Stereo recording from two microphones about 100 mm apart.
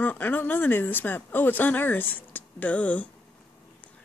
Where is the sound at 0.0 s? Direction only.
20° left (ahead or behind).